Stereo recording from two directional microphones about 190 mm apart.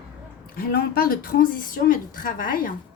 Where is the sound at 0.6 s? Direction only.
50° left (ahead or behind).